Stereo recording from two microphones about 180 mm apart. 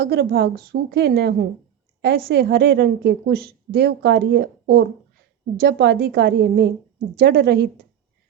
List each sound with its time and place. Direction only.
0.0 s a woman's voice: 60° right (ahead or behind)